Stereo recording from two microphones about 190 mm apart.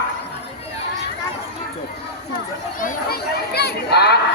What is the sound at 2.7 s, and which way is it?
Speech, 50° left (ahead or behind).